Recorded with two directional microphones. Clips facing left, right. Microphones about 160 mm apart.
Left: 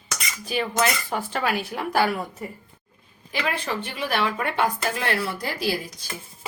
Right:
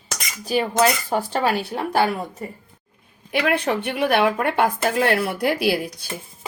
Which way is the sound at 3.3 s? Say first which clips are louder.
Right 7 dB; 65° right (ahead or behind).